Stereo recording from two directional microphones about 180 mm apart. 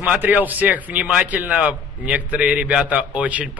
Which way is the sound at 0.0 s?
10° right (ahead or behind).